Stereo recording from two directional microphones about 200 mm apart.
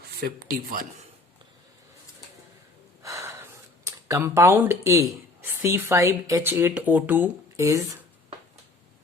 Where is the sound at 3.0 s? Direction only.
15° right (ahead or behind).